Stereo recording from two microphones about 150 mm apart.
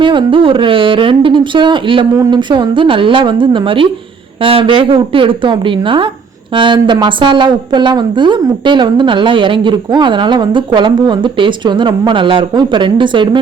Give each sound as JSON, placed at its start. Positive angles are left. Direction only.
{"t": 0.0, "sound": "a woman's voice", "side_deg": -35}